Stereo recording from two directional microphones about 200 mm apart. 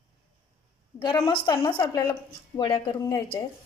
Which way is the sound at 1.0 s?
20° left (ahead or behind).